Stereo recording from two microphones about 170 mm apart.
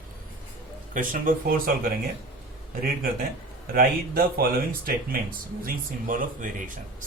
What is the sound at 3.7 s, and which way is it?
Speech, 60° right (ahead or behind).